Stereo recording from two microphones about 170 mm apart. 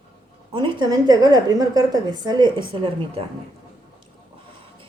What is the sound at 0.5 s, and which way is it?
A woman's voice, 25° right (ahead or behind).